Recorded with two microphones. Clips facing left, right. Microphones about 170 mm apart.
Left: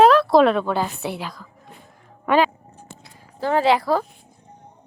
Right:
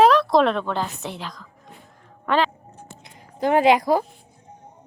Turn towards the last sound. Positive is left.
turn(degrees=-15)  # may be behind; listen again after turning